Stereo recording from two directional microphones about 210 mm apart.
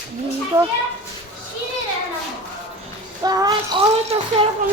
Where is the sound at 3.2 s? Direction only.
20° right (ahead or behind).